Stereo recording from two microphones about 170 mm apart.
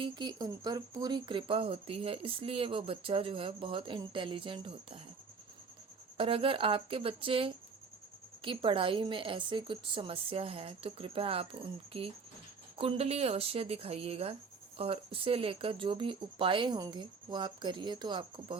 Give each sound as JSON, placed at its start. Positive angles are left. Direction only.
{"t": 0.0, "sound": "speech", "side_deg": -25}
{"t": 6.1, "sound": "speech", "side_deg": -30}
{"t": 12.7, "sound": "speech", "side_deg": -35}